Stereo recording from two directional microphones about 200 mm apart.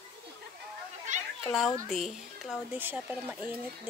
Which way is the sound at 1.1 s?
35° right (ahead or behind).